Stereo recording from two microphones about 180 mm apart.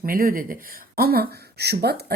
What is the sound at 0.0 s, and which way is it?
Speech, 50° right (ahead or behind).